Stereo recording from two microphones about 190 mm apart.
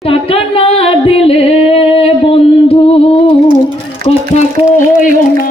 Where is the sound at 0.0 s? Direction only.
30° left (ahead or behind).